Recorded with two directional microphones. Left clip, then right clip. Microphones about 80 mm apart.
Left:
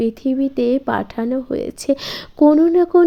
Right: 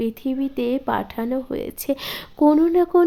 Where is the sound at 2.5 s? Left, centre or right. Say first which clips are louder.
Left 3 dB; left.